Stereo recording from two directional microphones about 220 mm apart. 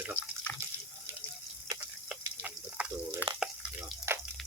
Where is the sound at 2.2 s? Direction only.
10° right (ahead or behind).